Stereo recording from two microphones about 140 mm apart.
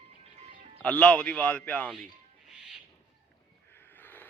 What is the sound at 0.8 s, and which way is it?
A man's voice, 10° left (ahead or behind).